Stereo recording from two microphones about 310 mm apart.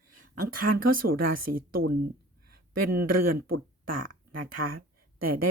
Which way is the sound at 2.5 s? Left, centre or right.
Right.